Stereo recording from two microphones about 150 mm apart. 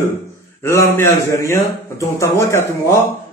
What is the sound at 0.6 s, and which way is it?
A man's voice, 20° left (ahead or behind).